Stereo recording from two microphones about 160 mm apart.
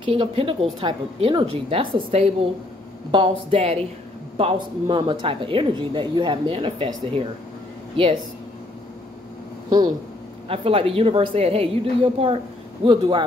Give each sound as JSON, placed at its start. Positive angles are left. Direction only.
{"t": 0.0, "sound": "a woman's voice", "side_deg": -35}
{"t": 10.5, "sound": "speech", "side_deg": -35}